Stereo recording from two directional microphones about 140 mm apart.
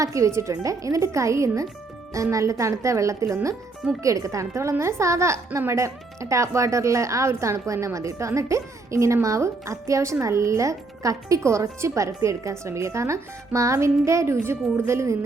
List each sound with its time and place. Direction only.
0.0 s a woman's voice: 20° right (ahead or behind)